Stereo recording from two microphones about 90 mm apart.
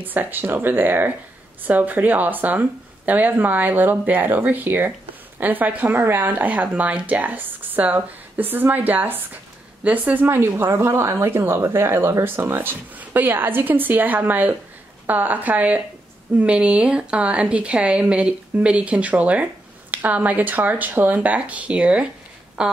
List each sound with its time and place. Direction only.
0.0 s a woman's voice: 20° right (ahead or behind)